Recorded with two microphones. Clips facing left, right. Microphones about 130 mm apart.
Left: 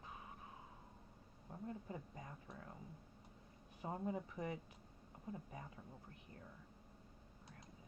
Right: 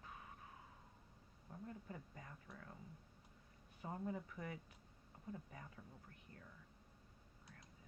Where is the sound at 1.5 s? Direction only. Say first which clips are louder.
Left 4 dB; 25° left (ahead or behind).